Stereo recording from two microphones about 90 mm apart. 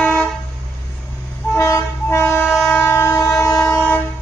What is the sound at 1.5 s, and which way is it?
Train, 35° left (ahead or behind).